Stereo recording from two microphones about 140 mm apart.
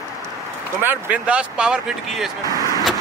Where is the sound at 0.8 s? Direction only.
10° right (ahead or behind).